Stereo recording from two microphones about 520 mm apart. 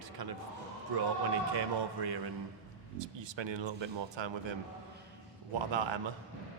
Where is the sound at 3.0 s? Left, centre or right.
Right.